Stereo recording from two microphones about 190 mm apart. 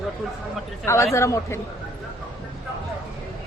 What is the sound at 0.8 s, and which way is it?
Speech, 15° left (ahead or behind).